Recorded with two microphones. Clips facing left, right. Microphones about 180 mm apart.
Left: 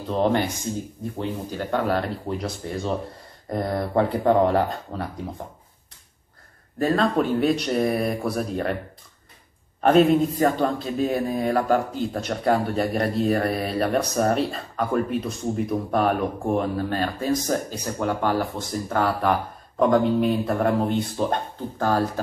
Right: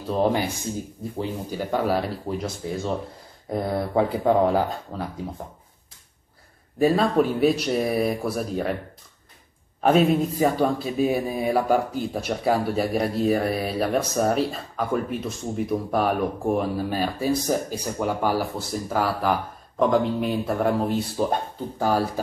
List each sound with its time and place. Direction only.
0.1 s a man's voice: 5° right (ahead or behind)
1.5 s a man's voice: 10° right (ahead or behind)
6.8 s a man's voice: 5° right (ahead or behind)
9.8 s a man's voice: 5° right (ahead or behind)